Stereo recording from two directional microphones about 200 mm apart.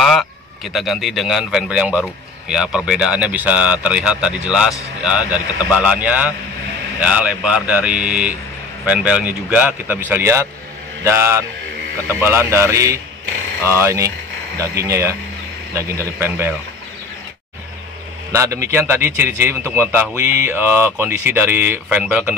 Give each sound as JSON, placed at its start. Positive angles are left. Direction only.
{"t": 0.0, "sound": "a sound", "side_deg": 0}
{"t": 0.7, "sound": "a man's voice", "side_deg": 0}
{"t": 18.3, "sound": "a man's voice", "side_deg": -15}